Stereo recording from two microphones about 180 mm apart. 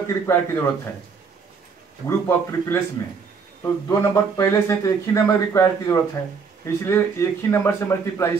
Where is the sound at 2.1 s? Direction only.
15° left (ahead or behind).